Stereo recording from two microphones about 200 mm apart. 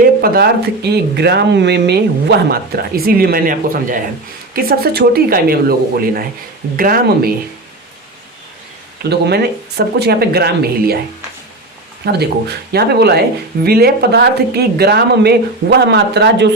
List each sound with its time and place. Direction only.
0.2 s speech: 50° right (ahead or behind)
9.0 s speech: 55° right (ahead or behind)
12.7 s speech: 55° right (ahead or behind)